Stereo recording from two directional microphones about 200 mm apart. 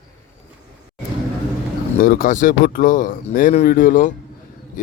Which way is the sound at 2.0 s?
45° left (ahead or behind).